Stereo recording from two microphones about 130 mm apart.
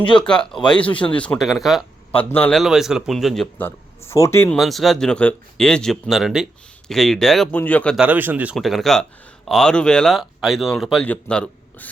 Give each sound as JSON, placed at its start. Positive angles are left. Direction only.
{"t": 0.2, "sound": "speech", "side_deg": 5}
{"t": 1.4, "sound": "speech", "side_deg": 0}
{"t": 2.1, "sound": "speech", "side_deg": 15}
{"t": 2.6, "sound": "speech", "side_deg": -5}
{"t": 3.6, "sound": "speech", "side_deg": 20}
{"t": 4.5, "sound": "speech", "side_deg": 0}
{"t": 7.5, "sound": "speech", "side_deg": 10}
{"t": 7.9, "sound": "speech", "side_deg": -10}
{"t": 8.5, "sound": "speech", "side_deg": 0}